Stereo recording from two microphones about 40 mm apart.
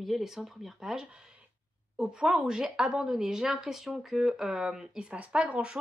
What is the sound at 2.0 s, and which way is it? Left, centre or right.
Speech, right.